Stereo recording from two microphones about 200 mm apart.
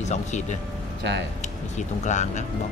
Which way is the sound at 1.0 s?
60° right (ahead or behind).